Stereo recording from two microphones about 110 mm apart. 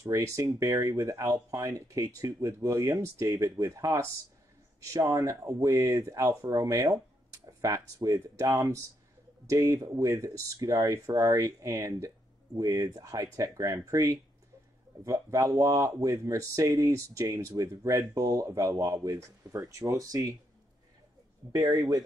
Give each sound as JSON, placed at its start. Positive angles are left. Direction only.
{"t": 0.0, "sound": "speech", "side_deg": -30}
{"t": 21.5, "sound": "speech", "side_deg": -35}